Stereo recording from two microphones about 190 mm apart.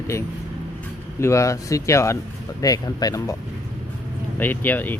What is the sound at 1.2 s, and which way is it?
Speech, 15° left (ahead or behind).